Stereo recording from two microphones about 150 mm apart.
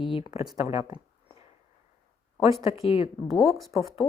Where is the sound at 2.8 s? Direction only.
40° left (ahead or behind).